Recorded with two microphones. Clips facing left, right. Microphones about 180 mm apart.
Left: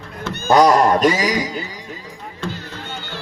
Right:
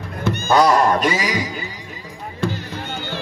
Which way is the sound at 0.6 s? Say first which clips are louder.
Left 3 dB; 40° left (ahead or behind).